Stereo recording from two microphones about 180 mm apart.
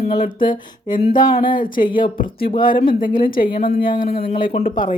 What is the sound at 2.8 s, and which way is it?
A woman's voice, 50° left (ahead or behind).